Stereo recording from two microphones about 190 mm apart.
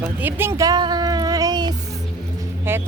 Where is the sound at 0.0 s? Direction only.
10° right (ahead or behind).